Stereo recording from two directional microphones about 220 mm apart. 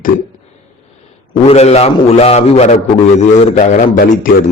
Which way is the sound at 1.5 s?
30° left (ahead or behind).